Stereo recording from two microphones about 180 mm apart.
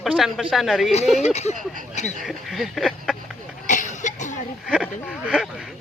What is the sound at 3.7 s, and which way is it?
Cough, 45° left (ahead or behind).